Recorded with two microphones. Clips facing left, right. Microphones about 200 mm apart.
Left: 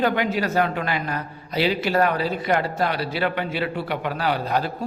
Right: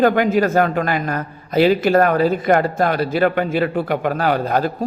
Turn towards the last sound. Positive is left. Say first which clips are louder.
# right 5 dB
turn(degrees=-45)  # may be behind; listen again after turning